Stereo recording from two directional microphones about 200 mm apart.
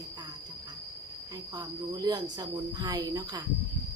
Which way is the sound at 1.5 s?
20° right (ahead or behind).